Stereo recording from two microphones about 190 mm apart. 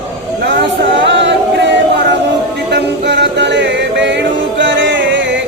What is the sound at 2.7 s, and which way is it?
Music, 60° right (ahead or behind).